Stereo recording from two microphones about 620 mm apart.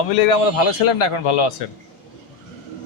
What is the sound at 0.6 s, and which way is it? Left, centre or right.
Speech, left.